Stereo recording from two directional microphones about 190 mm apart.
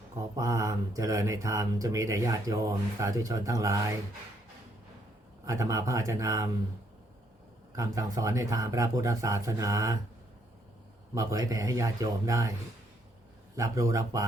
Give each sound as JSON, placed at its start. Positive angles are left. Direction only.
{"t": 0.3, "sound": "speech", "side_deg": -15}
{"t": 5.5, "sound": "speech", "side_deg": -15}
{"t": 7.8, "sound": "speech", "side_deg": -15}
{"t": 11.1, "sound": "speech", "side_deg": -15}
{"t": 13.6, "sound": "speech", "side_deg": -15}